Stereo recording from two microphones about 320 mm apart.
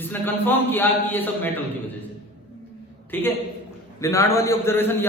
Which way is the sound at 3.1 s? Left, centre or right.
Centre.